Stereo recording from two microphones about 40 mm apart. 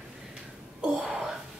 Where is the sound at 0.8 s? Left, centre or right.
Centre.